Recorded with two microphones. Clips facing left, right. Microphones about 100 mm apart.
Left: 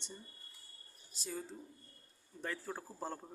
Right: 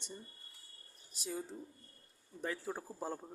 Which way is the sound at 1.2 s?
15° right (ahead or behind).